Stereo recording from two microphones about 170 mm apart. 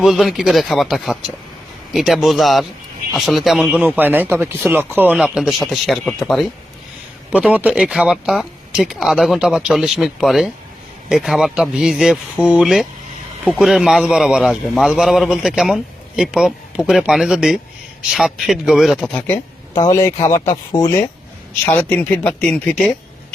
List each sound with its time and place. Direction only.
0.0 s a man's voice: centre (ahead or behind)
19.7 s speech: 20° left (ahead or behind); by 23.0 s 5° left (ahead or behind)